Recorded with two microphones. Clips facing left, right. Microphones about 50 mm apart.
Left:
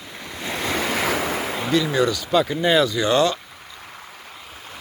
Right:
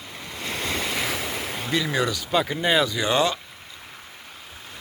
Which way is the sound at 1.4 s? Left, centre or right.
Left.